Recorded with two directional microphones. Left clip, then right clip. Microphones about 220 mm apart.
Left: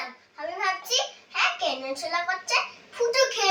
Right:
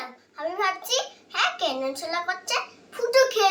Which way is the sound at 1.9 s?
20° right (ahead or behind).